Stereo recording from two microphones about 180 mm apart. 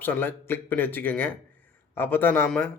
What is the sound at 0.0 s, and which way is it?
A man's voice, 10° left (ahead or behind).